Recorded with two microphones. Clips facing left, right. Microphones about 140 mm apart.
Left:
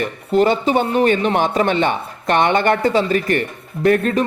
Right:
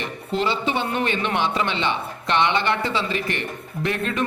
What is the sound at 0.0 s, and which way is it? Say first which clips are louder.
Speech: left 9 dB; 50° left (ahead or behind).